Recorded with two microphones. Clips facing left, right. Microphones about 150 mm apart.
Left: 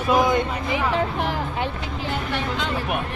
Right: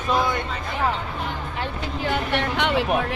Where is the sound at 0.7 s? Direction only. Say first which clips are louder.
Left 1 dB; 85° left.